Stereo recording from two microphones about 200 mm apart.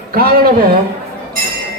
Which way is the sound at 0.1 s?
50° right (ahead or behind).